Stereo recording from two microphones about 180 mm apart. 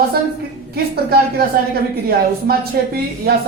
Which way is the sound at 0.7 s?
60° right (ahead or behind).